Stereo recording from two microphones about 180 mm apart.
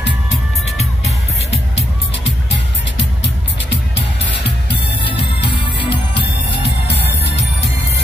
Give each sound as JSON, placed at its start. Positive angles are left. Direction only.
{"t": 5.4, "sound": "music", "side_deg": 30}